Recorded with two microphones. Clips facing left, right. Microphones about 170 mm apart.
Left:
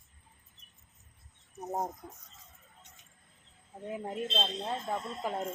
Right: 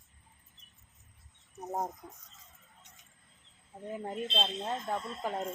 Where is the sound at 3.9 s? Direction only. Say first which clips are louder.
Left 1 dB; 5° left (ahead or behind).